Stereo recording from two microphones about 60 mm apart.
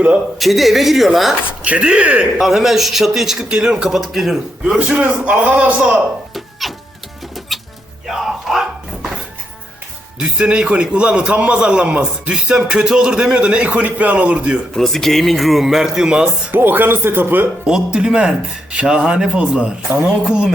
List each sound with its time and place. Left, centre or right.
0.3 s a man's voice: centre
1.6 s a man's voice: right
2.4 s a man's voice: centre
4.9 s a man's voice: right
6.3 s music: centre
8.0 s a sound: centre
10.2 s a man's voice: centre
14.7 s a man's voice: centre
16.5 s speech: right
17.7 s a man's voice: centre